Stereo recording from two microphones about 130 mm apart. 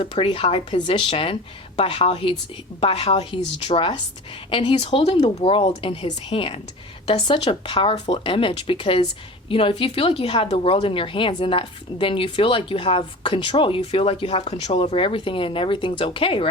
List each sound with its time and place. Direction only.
0.0 s a woman's voice: 40° left (ahead or behind)
4.8 s a woman's voice: 45° left (ahead or behind)